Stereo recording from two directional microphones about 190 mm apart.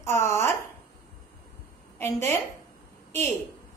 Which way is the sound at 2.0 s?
15° left (ahead or behind).